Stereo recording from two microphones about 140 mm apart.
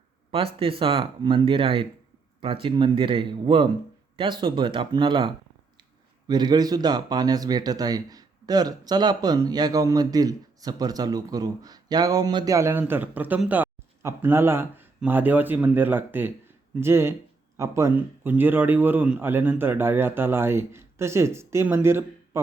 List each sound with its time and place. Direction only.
0.3 s a man's voice: 40° right (ahead or behind); by 22.4 s 15° right (ahead or behind)